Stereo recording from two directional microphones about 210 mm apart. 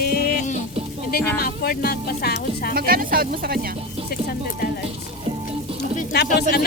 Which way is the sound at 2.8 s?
45° right (ahead or behind).